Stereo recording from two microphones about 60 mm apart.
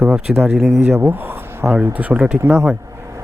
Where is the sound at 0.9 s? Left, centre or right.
Right.